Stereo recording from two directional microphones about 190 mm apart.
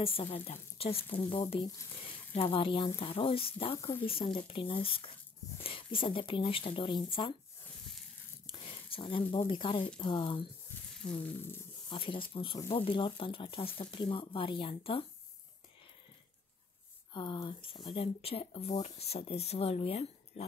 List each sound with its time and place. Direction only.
0.0 s speech: 30° left (ahead or behind)
8.5 s a sound: 30° left (ahead or behind)
9.5 s speech: 25° left (ahead or behind)
11.1 s speech: 10° left (ahead or behind)
11.9 s speech: 25° left (ahead or behind)
17.1 s speech: 25° left (ahead or behind)